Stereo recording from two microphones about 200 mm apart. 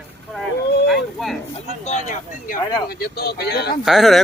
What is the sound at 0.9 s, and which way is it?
Speech, centre (ahead or behind).